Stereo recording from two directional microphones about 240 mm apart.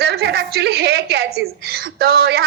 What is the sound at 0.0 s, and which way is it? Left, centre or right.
A woman's voice, right.